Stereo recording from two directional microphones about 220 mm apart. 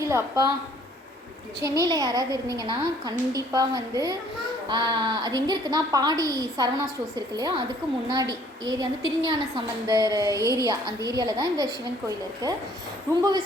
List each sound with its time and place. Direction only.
0.0 s a woman's voice: 15° right (ahead or behind)
1.6 s a woman's voice: 15° right (ahead or behind)